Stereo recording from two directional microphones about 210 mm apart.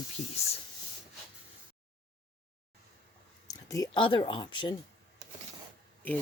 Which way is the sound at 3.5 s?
15° left (ahead or behind).